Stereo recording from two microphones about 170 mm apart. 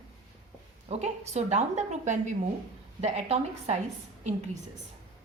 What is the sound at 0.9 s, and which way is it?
A woman's voice, 40° right (ahead or behind).